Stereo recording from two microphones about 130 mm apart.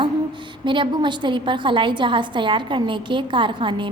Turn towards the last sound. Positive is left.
turn(degrees=-40)  # may be behind; listen again after turning